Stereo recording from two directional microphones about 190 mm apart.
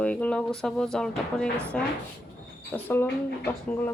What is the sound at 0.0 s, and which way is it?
Speech, 5° left (ahead or behind).